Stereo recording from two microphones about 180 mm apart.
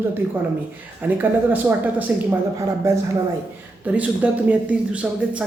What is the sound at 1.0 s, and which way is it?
Speech, 10° right (ahead or behind).